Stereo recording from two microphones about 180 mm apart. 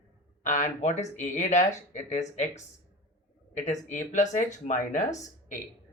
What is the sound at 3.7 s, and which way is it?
Speech, 45° left (ahead or behind).